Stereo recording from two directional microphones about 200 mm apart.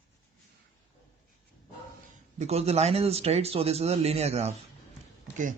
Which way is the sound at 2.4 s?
30° right (ahead or behind).